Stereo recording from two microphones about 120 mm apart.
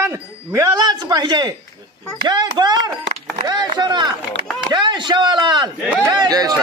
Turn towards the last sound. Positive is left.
turn(degrees=-30)  # may be behind; listen again after turning